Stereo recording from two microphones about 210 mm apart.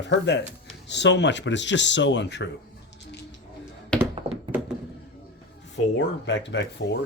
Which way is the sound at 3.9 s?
5° left (ahead or behind).